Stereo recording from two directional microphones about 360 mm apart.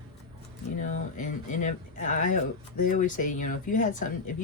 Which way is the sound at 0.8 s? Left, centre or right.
Left.